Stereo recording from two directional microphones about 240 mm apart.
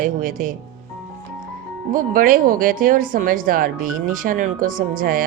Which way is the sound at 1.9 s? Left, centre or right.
Right.